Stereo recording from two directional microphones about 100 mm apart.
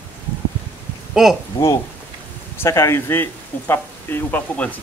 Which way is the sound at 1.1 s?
5° right (ahead or behind).